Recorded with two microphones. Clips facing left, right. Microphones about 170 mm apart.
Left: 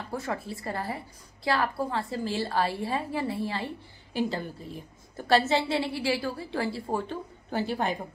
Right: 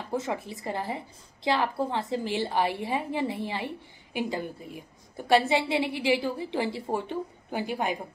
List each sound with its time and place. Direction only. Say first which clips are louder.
0.1 s a woman's voice: right 3 dB; 20° right (ahead or behind)